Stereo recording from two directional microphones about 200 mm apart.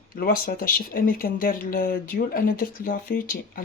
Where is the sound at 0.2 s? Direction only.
45° left (ahead or behind).